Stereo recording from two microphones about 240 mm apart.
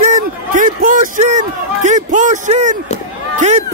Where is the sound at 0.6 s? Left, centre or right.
Right.